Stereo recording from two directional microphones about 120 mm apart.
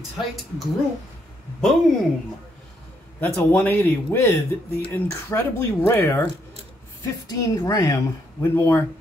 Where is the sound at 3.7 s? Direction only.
15° left (ahead or behind).